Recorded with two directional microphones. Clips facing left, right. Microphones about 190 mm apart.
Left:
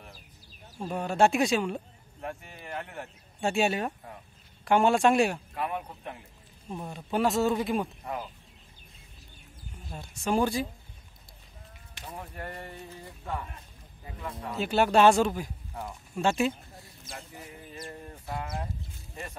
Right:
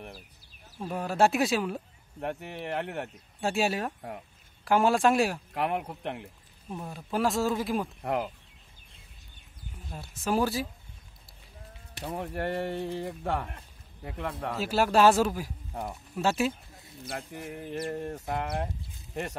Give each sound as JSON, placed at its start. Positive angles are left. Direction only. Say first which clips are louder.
{"t": 0.7, "sound": "speech", "louder": "left 1 dB", "side_deg": 0}
{"t": 2.1, "sound": "speech", "louder": "right 5 dB", "side_deg": -70}
{"t": 3.3, "sound": "speech", "louder": "left 1 dB", "side_deg": 0}
{"t": 5.5, "sound": "speech", "louder": "right 3 dB", "side_deg": -70}
{"t": 6.8, "sound": "speech", "louder": "left 1 dB", "side_deg": 0}
{"t": 8.0, "sound": "speech", "louder": "right 6 dB", "side_deg": -65}
{"t": 9.8, "sound": "speech", "louder": "even", "side_deg": 0}
{"t": 12.0, "sound": "speech", "louder": "right 8 dB", "side_deg": -65}
{"t": 14.6, "sound": "speech", "louder": "left 1 dB", "side_deg": 0}
{"t": 17.0, "sound": "speech", "louder": "right 7 dB", "side_deg": -70}